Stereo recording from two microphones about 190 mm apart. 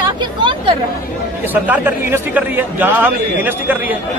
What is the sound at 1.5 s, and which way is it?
Speech, 10° right (ahead or behind).